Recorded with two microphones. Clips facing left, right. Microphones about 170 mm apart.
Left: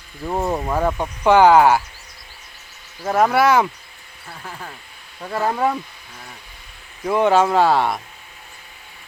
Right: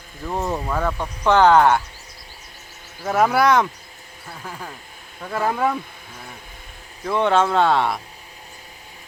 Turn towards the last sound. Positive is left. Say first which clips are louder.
# left 2 dB
turn(degrees=0)  # may be behind; listen again after turning